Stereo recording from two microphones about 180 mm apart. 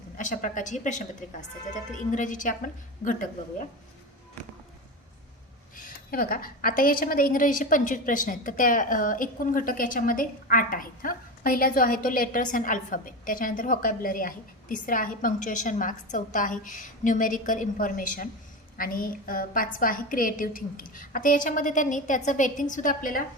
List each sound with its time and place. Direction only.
0.2 s a woman's voice: 45° left (ahead or behind)
5.7 s a woman's voice: 50° left (ahead or behind)